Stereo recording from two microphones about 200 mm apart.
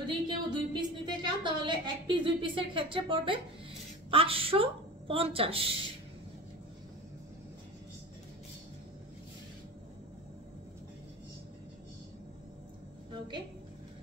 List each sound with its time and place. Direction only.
0.0 s a woman's voice: 25° right (ahead or behind)